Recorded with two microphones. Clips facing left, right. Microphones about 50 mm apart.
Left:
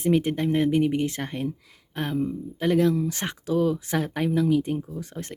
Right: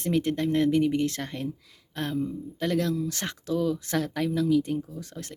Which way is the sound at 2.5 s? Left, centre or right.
Centre.